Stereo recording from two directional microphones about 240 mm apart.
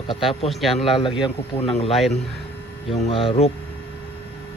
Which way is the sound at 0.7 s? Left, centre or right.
Left.